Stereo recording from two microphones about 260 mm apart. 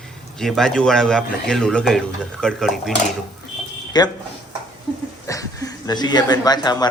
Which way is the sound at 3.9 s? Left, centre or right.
Centre.